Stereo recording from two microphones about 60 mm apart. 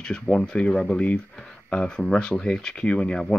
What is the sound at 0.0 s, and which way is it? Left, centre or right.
Speech, centre.